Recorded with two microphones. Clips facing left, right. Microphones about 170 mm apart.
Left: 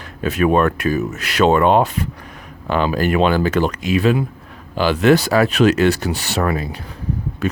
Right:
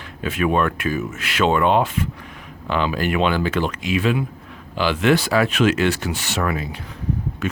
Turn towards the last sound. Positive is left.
turn(degrees=35)  # may be behind; listen again after turning